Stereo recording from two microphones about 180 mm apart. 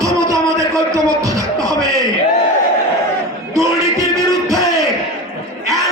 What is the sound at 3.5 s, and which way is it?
Music, 15° right (ahead or behind).